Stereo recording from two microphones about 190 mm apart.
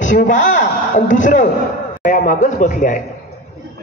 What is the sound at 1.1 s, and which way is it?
A man's voice, 40° left (ahead or behind).